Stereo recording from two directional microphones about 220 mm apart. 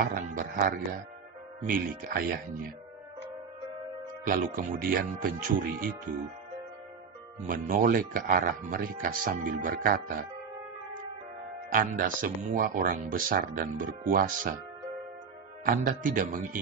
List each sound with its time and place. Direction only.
0.0 s speech: 40° right (ahead or behind)
4.3 s speech: 40° right (ahead or behind)
7.4 s speech: 40° right (ahead or behind)
11.7 s speech: 40° right (ahead or behind)
15.6 s speech: 40° right (ahead or behind)